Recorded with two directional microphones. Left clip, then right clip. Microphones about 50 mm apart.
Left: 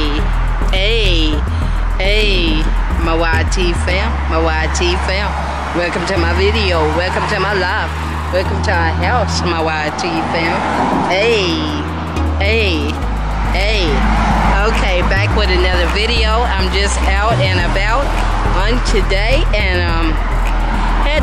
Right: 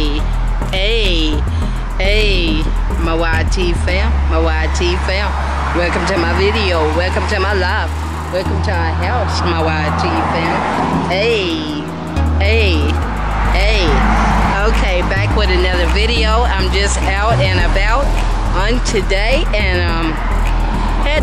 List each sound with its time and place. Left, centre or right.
0.7 s a sound: centre
2.0 s music: centre
3.1 s speech: centre
8.4 s speech: left; by 9.9 s centre
9.9 s speech: centre
10.6 s speech: centre
11.1 s speech: centre
12.4 s speech: centre
14.0 s vehicle: centre
14.3 s speech: centre